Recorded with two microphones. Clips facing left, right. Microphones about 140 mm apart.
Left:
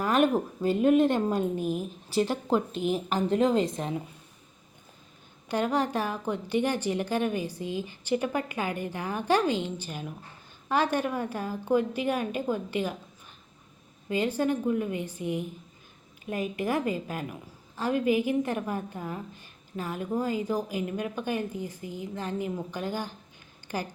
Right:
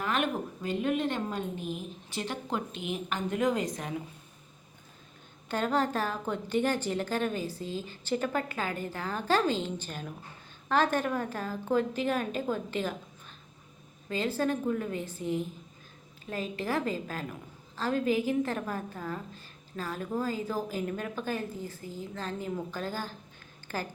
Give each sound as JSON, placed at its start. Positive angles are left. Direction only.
{"t": 0.0, "sound": "a woman's voice", "side_deg": 40}
{"t": 5.5, "sound": "a woman's voice", "side_deg": 15}
{"t": 14.1, "sound": "a woman's voice", "side_deg": 15}